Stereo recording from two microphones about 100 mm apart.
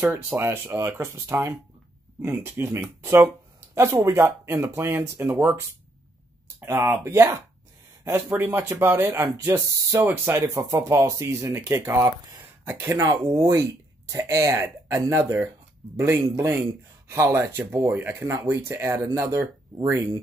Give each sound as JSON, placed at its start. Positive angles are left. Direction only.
{"t": 0.4, "sound": "speech", "side_deg": -25}
{"t": 12.4, "sound": "a sound", "side_deg": -25}
{"t": 13.0, "sound": "speech", "side_deg": -45}